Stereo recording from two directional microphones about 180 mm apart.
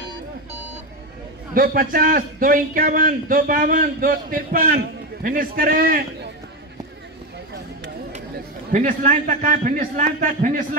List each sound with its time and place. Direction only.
1.5 s a man's voice: 55° right (ahead or behind)
8.7 s a man's voice: 45° right (ahead or behind)